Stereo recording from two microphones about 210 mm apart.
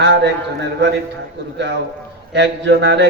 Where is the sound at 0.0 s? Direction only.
55° right (ahead or behind).